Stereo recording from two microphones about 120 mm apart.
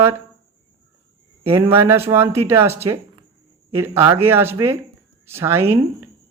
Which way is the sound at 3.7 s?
20° right (ahead or behind).